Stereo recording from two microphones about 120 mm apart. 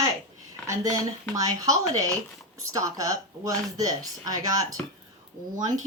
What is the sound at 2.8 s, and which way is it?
Speech, 30° right (ahead or behind).